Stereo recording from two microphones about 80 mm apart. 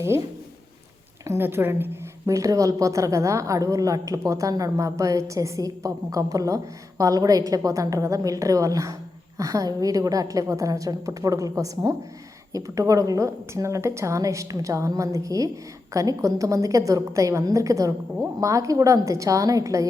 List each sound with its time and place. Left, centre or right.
1.4 s a woman's voice: right
2.2 s a woman's voice: right